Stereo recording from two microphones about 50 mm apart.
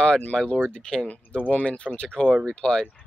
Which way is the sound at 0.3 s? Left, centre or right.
Centre.